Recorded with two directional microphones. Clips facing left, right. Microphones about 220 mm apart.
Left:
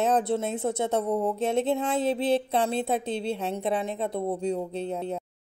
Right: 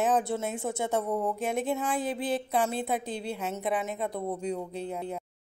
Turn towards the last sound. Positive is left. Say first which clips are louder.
# left 4 dB
turn(degrees=25)  # may be behind; listen again after turning